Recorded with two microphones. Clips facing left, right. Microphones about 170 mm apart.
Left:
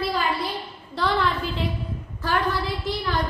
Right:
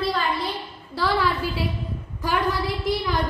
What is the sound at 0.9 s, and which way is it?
Speech, 5° right (ahead or behind).